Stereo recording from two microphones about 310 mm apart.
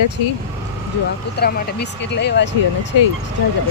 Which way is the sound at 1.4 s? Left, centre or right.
Left.